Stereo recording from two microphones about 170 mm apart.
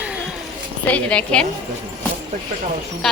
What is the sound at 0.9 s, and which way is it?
Speech, 5° left (ahead or behind).